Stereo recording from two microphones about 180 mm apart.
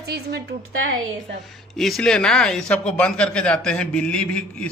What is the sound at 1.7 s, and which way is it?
Speech, centre (ahead or behind).